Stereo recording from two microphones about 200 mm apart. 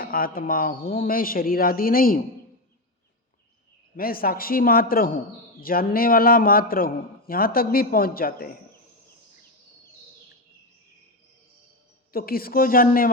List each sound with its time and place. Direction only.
0.0 s a man's voice: 45° left (ahead or behind)
3.9 s a man's voice: 45° left (ahead or behind)
12.1 s a man's voice: 50° left (ahead or behind)